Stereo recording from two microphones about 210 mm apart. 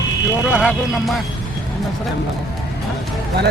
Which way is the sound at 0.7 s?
Centre (ahead or behind).